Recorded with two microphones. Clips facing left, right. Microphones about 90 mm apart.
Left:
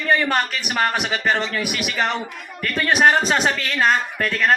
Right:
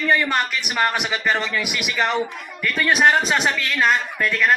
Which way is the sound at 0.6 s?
40° left (ahead or behind).